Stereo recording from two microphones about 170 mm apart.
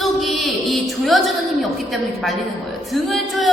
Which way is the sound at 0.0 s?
Centre (ahead or behind).